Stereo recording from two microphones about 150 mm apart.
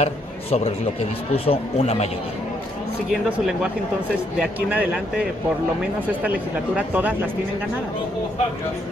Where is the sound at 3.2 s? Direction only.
5° right (ahead or behind).